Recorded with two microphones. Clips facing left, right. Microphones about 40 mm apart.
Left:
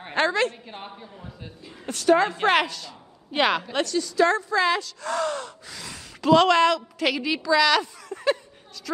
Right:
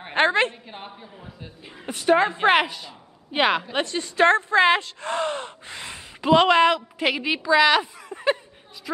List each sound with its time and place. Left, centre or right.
0.1 s speech: right
0.7 s a man's voice: centre
1.9 s speech: right
3.7 s speech: right